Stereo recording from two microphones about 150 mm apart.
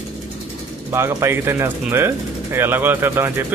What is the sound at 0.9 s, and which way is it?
A man's voice, 20° right (ahead or behind).